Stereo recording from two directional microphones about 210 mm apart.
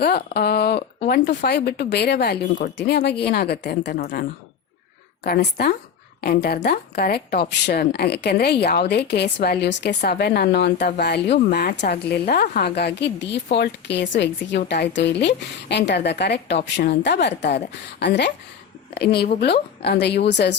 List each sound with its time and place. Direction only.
0.0 s speech: 50° left (ahead or behind)